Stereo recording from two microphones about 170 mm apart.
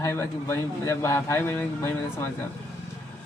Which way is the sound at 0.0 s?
15° left (ahead or behind).